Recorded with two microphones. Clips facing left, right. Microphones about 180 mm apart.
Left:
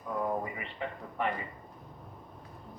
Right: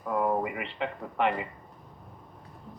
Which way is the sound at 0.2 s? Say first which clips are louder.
Right 5 dB; 85° right.